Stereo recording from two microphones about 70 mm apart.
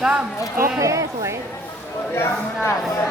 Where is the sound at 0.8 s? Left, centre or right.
Right.